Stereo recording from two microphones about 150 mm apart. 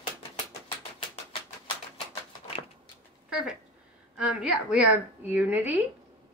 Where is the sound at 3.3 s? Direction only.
5° right (ahead or behind).